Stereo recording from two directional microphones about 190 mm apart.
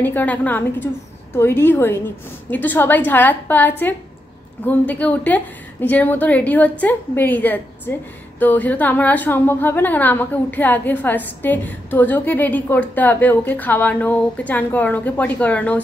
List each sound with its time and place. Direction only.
0.0 s a woman's voice: 10° left (ahead or behind)